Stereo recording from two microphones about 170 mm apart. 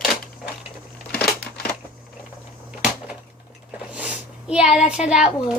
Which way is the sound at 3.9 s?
5° right (ahead or behind).